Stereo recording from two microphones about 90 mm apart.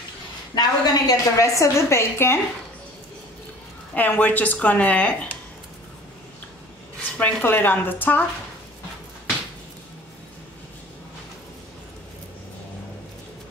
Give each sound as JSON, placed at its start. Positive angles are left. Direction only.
{"t": 0.6, "sound": "a woman's voice", "side_deg": 40}
{"t": 3.9, "sound": "speech", "side_deg": 20}
{"t": 7.2, "sound": "speech", "side_deg": 20}